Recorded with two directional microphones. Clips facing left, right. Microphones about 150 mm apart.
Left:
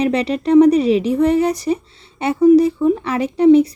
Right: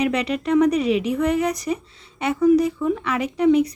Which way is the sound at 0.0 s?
30° left (ahead or behind).